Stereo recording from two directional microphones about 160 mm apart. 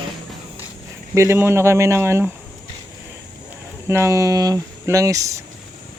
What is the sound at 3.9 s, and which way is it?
Speech, 20° right (ahead or behind).